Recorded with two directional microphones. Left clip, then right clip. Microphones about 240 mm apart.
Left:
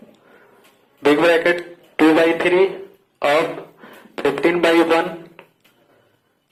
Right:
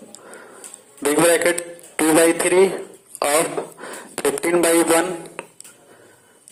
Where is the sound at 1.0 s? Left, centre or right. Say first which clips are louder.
Left 2 dB; right.